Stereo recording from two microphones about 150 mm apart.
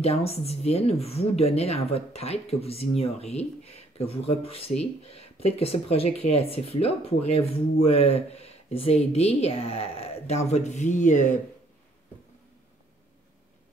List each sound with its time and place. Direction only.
0.0 s a woman's voice: 45° left (ahead or behind)